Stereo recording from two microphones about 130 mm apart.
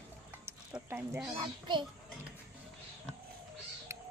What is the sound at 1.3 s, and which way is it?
Speech, 35° right (ahead or behind).